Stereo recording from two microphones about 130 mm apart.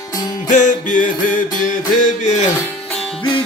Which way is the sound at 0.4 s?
75° left (ahead or behind).